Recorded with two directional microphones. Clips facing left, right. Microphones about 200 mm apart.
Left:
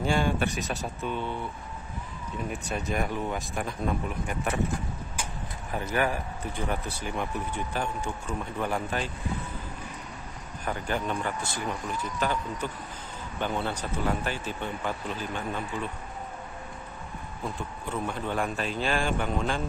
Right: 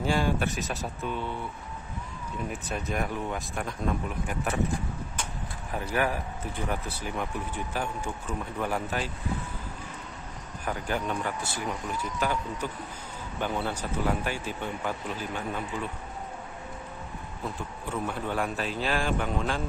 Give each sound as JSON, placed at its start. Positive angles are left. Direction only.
{"t": 0.0, "sound": "speech", "side_deg": 0}
{"t": 2.5, "sound": "speech", "side_deg": 0}
{"t": 6.7, "sound": "speech", "side_deg": -5}
{"t": 10.6, "sound": "speech", "side_deg": -5}
{"t": 18.0, "sound": "speech", "side_deg": -5}